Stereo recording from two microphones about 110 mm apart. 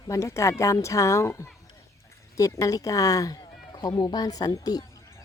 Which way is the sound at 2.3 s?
30° left (ahead or behind).